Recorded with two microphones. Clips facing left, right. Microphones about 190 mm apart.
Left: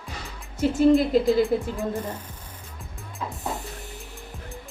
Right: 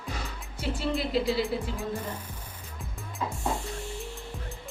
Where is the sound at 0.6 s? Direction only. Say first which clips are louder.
Left 9 dB; 45° left (ahead or behind).